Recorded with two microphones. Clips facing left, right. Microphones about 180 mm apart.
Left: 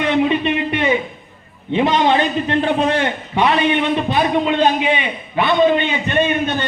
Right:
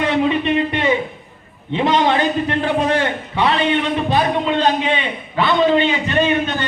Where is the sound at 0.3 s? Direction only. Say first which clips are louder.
Right 1 dB; 20° left (ahead or behind).